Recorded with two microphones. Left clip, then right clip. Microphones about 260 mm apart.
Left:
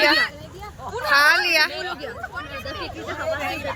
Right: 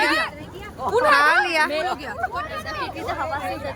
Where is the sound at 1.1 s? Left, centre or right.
Centre.